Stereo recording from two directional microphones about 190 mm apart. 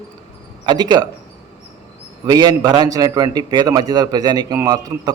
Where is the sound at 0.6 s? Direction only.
20° right (ahead or behind).